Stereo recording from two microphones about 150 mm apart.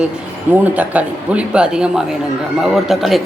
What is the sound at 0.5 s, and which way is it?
A woman's voice, 10° right (ahead or behind).